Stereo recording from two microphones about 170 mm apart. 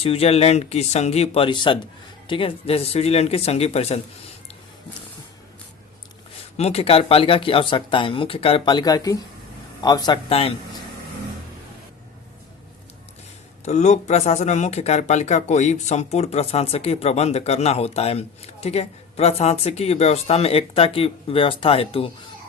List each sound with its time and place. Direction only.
0.0 s speech: 35° left (ahead or behind)
6.6 s speech: 35° left (ahead or behind)
13.7 s speech: 45° left (ahead or behind)